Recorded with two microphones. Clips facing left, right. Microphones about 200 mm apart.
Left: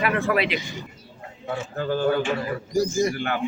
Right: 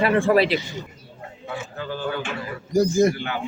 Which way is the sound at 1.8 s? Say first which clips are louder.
Left 7 dB; 45° left (ahead or behind).